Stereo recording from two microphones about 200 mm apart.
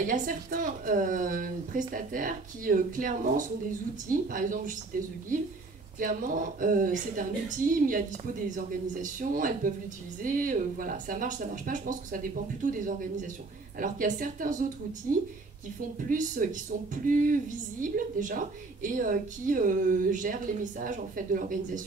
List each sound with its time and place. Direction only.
0.0 s a woman's voice: 40° right (ahead or behind)
5.9 s a woman's voice: 40° right (ahead or behind)